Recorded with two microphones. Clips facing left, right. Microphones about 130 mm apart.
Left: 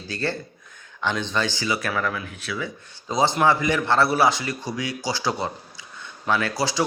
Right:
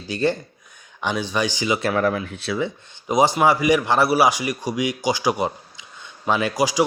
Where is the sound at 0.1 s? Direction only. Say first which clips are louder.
Right 6 dB; 15° right (ahead or behind).